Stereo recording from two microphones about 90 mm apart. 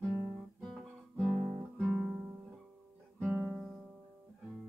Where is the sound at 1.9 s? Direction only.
25° right (ahead or behind).